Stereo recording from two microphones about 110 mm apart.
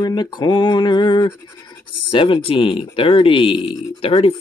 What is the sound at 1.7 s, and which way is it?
Speech, 50° left (ahead or behind).